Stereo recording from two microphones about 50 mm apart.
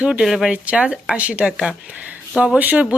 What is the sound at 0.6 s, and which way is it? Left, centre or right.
Speech, right.